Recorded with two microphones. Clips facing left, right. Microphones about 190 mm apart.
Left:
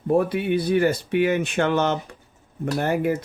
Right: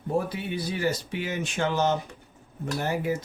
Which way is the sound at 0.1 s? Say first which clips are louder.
Left 8 dB; 60° left (ahead or behind).